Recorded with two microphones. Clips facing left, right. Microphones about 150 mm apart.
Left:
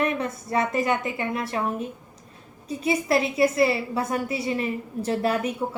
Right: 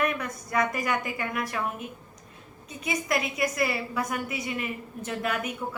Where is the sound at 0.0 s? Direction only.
30° left (ahead or behind).